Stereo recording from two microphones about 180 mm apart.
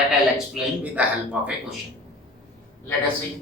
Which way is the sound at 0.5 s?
5° right (ahead or behind).